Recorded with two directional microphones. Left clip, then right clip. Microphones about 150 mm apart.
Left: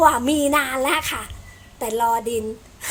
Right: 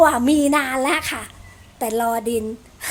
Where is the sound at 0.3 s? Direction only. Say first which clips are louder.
Right 1 dB; 30° right (ahead or behind).